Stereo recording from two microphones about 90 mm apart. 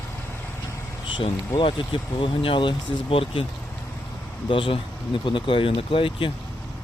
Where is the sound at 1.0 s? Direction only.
75° left (ahead or behind).